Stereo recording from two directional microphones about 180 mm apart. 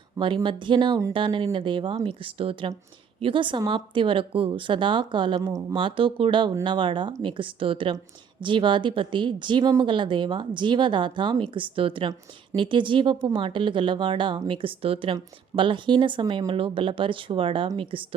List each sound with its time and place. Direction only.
0.2 s speech: 25° right (ahead or behind)